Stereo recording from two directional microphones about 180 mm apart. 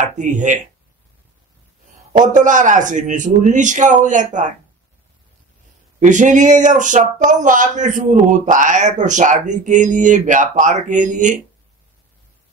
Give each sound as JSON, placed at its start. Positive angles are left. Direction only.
{"t": 0.0, "sound": "speech", "side_deg": -40}
{"t": 2.1, "sound": "a man's voice", "side_deg": -45}
{"t": 5.9, "sound": "a man's voice", "side_deg": -45}